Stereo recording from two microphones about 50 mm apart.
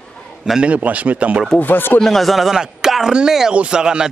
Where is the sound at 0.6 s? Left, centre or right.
Right.